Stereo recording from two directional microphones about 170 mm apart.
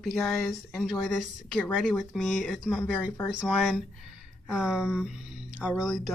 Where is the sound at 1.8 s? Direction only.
5° left (ahead or behind).